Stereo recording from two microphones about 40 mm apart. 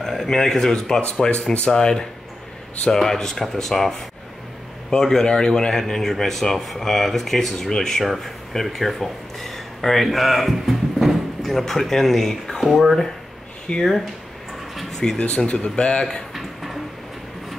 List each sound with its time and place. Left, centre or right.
0.0 s speech: centre
1.0 s speech: left
8.0 s speech: centre
13.7 s speech: left
14.9 s a sound: centre
15.1 s speech: left